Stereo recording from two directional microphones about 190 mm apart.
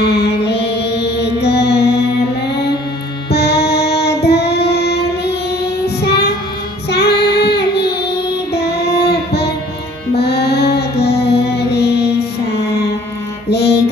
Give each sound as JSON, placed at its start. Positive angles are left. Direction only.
{"t": 0.0, "sound": "music", "side_deg": 60}
{"t": 3.3, "sound": "child singing", "side_deg": 60}
{"t": 10.1, "sound": "music", "side_deg": 60}
{"t": 13.5, "sound": "music", "side_deg": 60}